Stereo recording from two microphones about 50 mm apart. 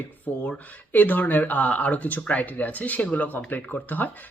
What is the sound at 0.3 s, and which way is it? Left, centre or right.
Speech, left.